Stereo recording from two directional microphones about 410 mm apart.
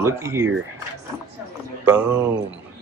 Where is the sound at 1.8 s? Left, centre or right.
Centre.